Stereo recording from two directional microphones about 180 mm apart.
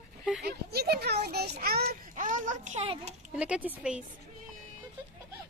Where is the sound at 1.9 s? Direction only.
45° right (ahead or behind).